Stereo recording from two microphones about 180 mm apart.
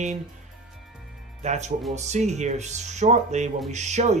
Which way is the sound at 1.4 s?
40° right (ahead or behind).